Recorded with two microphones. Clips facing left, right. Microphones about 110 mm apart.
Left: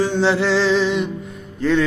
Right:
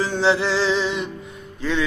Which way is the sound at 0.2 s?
50° left (ahead or behind).